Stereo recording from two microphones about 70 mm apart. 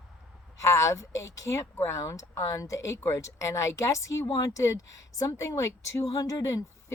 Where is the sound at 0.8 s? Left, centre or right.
Left.